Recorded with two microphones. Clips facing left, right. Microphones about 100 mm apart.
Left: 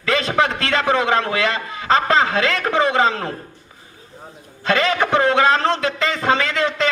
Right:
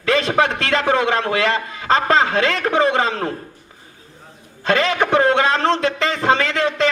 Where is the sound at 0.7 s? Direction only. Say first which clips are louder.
Right 1 dB; 35° right (ahead or behind).